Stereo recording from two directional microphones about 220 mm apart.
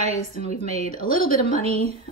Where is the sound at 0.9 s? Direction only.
40° left (ahead or behind).